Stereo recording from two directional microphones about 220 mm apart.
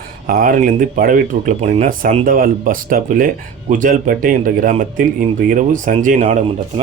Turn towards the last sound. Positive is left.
turn(degrees=-30)  # may be behind; listen again after turning